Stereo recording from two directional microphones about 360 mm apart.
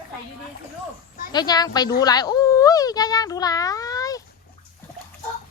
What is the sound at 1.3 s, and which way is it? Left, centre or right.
Speech, centre.